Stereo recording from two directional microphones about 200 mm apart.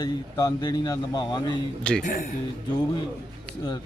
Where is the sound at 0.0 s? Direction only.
20° left (ahead or behind).